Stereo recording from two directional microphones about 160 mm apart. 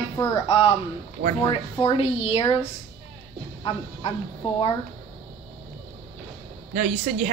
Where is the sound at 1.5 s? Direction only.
35° left (ahead or behind).